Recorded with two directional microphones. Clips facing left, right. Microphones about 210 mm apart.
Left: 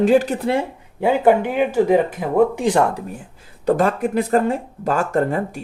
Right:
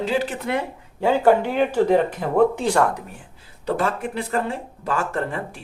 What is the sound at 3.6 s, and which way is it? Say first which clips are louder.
Speech: left 6 dB; 45° left (ahead or behind).